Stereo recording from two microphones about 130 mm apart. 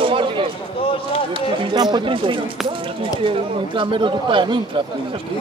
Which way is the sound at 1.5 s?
35° right (ahead or behind).